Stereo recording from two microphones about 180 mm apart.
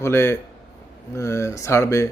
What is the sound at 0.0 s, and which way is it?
A man's voice, 15° left (ahead or behind).